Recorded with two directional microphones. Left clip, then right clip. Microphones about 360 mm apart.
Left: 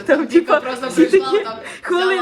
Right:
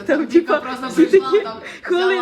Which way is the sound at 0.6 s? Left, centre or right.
Centre.